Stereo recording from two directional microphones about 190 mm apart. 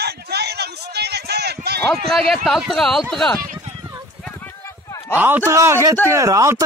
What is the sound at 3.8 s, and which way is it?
Clip-clop, 20° right (ahead or behind).